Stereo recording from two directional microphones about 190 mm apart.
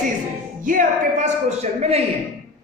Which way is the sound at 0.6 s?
45° right (ahead or behind).